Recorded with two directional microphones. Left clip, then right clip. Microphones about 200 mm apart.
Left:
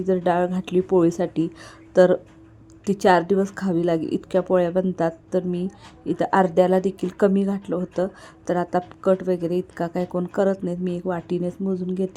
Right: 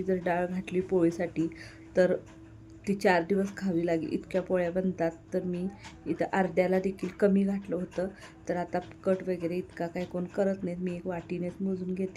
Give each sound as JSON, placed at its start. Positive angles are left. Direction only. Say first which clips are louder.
{"t": 0.0, "sound": "a woman's voice", "louder": "left 9 dB", "side_deg": 20}